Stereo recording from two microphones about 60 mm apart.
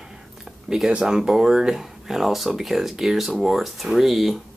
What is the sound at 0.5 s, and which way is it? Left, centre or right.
Speech, centre.